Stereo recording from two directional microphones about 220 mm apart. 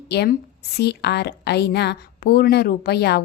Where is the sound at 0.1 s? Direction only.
50° left (ahead or behind).